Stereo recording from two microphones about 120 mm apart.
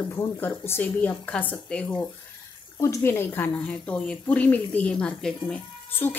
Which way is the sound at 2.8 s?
25° left (ahead or behind).